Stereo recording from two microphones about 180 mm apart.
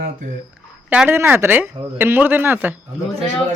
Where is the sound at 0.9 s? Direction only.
10° right (ahead or behind).